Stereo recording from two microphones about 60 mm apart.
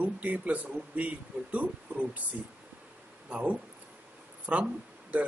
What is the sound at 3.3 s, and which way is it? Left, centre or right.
Speech, right.